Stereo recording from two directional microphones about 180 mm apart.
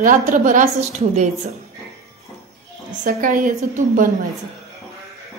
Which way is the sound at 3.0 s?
50° right (ahead or behind).